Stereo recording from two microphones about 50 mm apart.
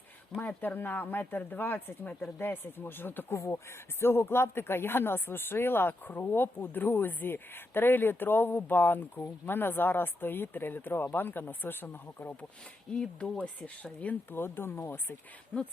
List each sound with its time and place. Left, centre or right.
0.3 s speech: left
3.3 s speech: left
4.0 s speech: left
13.0 s speech: left
14.3 s speech: left